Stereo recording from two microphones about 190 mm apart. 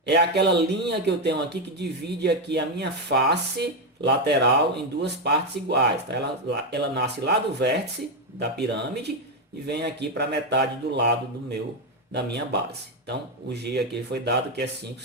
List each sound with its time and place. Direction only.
0.1 s speech: 65° right (ahead or behind)
12.1 s speech: 65° right (ahead or behind)